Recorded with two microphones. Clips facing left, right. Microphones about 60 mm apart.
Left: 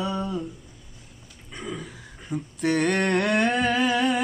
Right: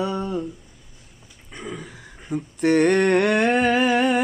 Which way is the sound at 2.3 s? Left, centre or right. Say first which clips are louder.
Right 5 dB; right.